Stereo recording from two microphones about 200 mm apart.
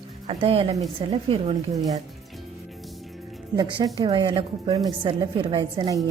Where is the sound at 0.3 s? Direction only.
30° right (ahead or behind).